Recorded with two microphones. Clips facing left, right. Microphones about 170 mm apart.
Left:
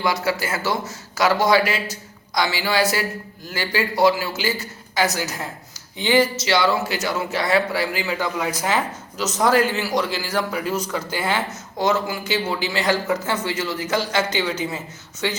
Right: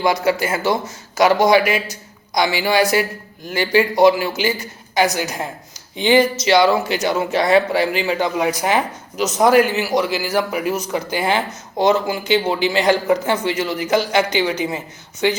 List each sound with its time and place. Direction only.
0.3 s a man's voice: 20° right (ahead or behind)